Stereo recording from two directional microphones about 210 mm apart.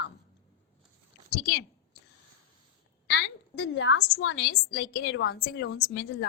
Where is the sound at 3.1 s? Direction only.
55° left (ahead or behind).